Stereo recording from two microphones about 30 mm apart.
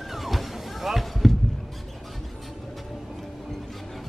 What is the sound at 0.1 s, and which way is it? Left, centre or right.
Music, centre.